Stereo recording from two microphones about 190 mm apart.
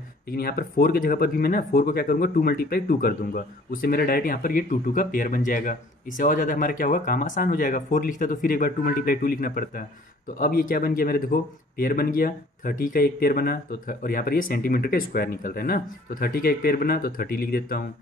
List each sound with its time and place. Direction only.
0.3 s speech: 55° left (ahead or behind)